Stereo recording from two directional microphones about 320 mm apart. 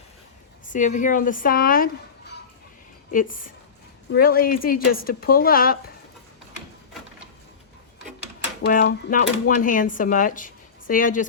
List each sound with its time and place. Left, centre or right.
0.7 s speech: left
8.6 s speech: left